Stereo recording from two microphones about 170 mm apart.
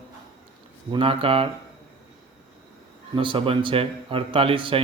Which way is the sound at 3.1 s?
30° right (ahead or behind).